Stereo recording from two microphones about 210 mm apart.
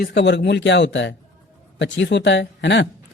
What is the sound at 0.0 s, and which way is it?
Speech, 55° left (ahead or behind).